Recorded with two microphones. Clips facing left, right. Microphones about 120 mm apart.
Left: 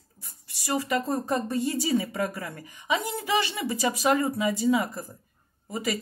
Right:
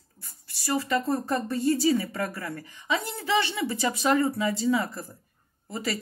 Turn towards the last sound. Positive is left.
turn(degrees=15)  # may be behind; listen again after turning